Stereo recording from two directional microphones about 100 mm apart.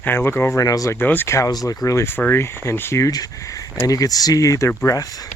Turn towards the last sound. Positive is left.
turn(degrees=30)  # may be behind; listen again after turning